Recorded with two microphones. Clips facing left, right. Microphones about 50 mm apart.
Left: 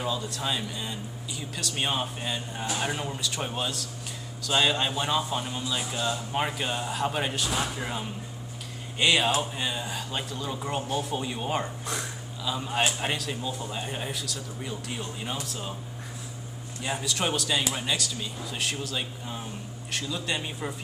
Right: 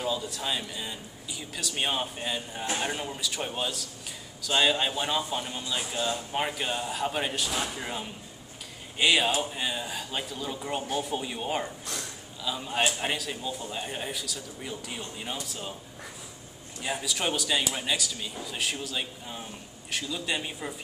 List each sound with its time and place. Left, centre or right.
0.0 s speech: centre
11.8 s a sound: centre
12.4 s speech: centre
16.8 s speech: centre